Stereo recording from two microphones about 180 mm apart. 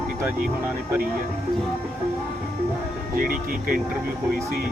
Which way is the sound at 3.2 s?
50° right (ahead or behind).